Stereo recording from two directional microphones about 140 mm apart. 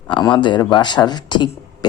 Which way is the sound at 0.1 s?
35° left (ahead or behind).